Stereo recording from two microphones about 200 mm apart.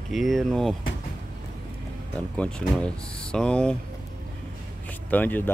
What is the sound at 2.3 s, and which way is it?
Speech, 5° left (ahead or behind).